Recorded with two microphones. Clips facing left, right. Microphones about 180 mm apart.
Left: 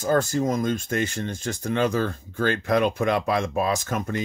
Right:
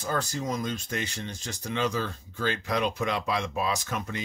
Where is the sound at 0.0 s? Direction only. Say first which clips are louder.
Left 9 dB; 45° left (ahead or behind).